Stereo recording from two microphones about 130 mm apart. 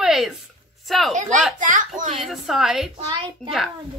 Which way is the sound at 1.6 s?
90° right.